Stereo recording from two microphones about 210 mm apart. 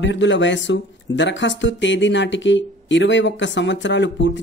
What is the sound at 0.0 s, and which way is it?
Speech, 60° left (ahead or behind).